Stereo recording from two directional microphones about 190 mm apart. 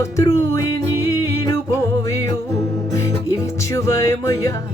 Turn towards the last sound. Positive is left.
turn(degrees=15)  # may be behind; listen again after turning